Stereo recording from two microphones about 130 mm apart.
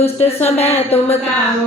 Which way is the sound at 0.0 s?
50° left (ahead or behind).